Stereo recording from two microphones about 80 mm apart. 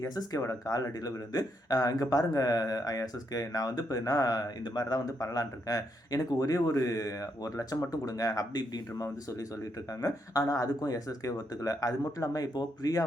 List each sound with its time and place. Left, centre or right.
0.0 s speech: left